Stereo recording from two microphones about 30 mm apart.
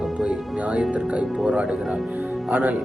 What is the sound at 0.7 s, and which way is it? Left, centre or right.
Speech, right.